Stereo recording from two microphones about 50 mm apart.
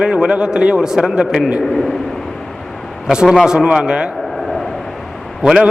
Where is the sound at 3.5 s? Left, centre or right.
Centre.